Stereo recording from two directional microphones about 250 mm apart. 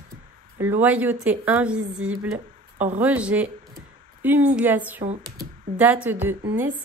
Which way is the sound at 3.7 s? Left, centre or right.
Centre.